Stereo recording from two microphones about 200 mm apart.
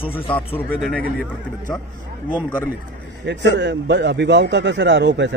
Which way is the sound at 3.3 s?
60° right (ahead or behind).